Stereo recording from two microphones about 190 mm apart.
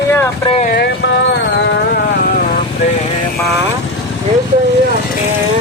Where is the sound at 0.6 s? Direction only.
55° left (ahead or behind).